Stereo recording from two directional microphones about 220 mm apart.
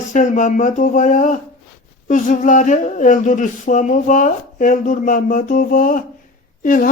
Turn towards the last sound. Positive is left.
turn(degrees=40)  # may be behind; listen again after turning